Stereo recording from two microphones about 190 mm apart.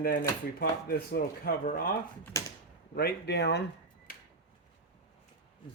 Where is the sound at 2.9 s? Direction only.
60° left (ahead or behind).